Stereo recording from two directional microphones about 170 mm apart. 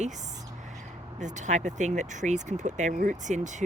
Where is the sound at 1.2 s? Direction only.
45° right (ahead or behind).